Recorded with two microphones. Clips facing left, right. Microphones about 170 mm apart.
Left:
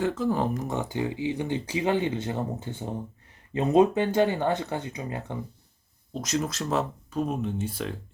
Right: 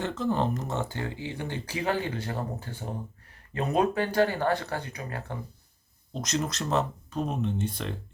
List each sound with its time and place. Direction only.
0.0 s speech: 10° left (ahead or behind)
6.1 s speech: 5° left (ahead or behind)